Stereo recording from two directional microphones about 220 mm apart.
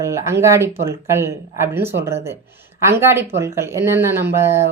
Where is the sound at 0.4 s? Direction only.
15° right (ahead or behind).